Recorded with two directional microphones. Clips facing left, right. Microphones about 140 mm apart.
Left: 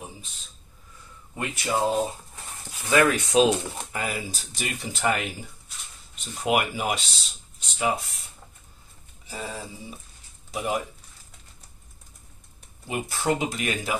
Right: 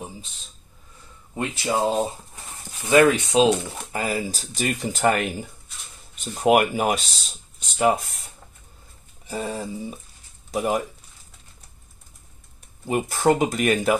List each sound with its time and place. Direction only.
1.3 s speech: 25° right (ahead or behind)
3.9 s speech: 35° right (ahead or behind)
6.4 s speech: 50° right (ahead or behind)
9.3 s speech: 45° right (ahead or behind)
12.8 s speech: 45° right (ahead or behind)